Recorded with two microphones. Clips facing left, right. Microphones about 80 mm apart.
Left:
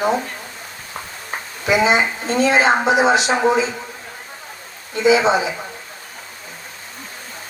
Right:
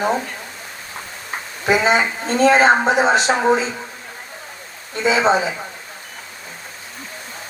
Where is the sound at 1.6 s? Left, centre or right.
Right.